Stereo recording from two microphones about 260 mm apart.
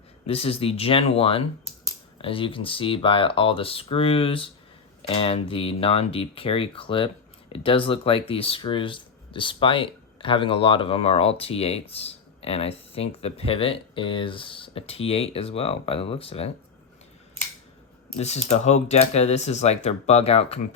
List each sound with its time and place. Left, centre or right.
0.3 s speech: left
18.2 s speech: left